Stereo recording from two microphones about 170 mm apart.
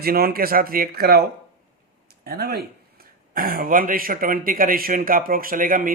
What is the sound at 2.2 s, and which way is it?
A man's voice, 65° right (ahead or behind).